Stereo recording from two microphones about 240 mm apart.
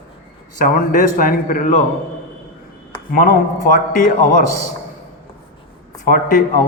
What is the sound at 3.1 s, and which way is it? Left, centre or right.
A man's voice, left.